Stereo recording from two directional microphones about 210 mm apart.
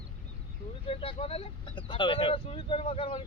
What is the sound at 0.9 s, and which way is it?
Speech, 25° left (ahead or behind).